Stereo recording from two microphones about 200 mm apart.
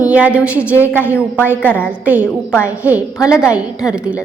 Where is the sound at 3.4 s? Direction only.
5° right (ahead or behind).